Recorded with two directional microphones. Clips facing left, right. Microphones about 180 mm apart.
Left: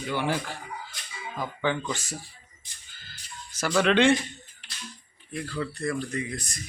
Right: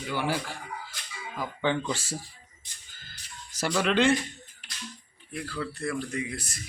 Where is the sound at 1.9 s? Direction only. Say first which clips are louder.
Right 1 dB; 30° right (ahead or behind).